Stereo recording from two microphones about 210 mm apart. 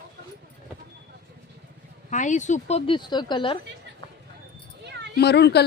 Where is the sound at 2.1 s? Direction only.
35° left (ahead or behind).